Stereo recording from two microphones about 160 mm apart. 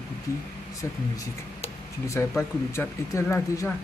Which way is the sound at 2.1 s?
15° left (ahead or behind).